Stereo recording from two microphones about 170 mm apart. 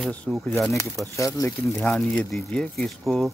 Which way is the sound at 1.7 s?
5° left (ahead or behind).